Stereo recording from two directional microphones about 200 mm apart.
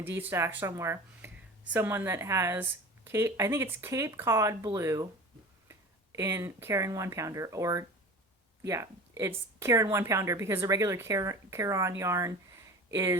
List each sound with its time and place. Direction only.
0.0 s speech: 10° right (ahead or behind)